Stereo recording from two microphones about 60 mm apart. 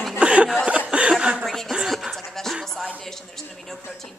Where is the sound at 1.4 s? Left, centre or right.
Centre.